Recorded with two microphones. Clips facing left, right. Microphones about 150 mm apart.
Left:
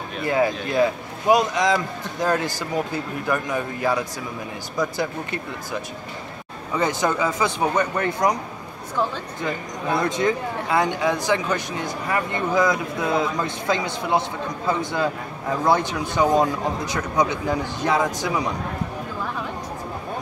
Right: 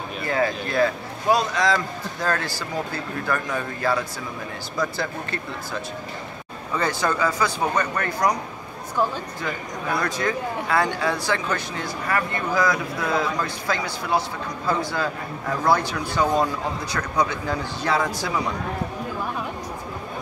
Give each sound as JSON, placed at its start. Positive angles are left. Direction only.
{"t": 0.3, "sound": "speech", "side_deg": 15}
{"t": 9.4, "sound": "speech", "side_deg": 20}